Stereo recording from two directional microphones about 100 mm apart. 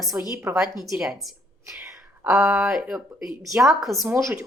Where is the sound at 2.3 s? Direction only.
5° right (ahead or behind).